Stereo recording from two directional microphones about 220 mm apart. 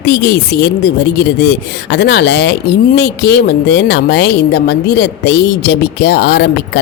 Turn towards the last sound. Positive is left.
turn(degrees=50)  # may be behind; listen again after turning